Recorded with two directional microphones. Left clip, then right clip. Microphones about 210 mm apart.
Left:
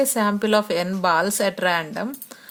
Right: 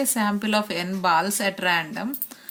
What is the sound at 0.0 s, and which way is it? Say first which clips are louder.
A woman's voice: left 4 dB; 60° left (ahead or behind).